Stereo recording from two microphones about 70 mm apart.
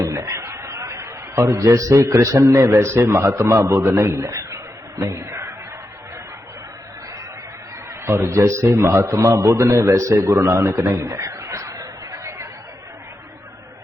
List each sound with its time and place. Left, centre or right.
0.0 s a sound: right
1.9 s a man's voice: right
8.0 s a man's voice: right